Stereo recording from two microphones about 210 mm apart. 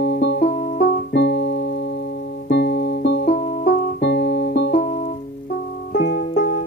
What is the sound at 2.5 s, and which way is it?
Music, 50° left (ahead or behind).